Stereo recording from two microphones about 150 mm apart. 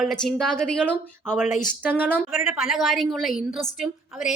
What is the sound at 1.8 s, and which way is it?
A woman's voice, 10° right (ahead or behind).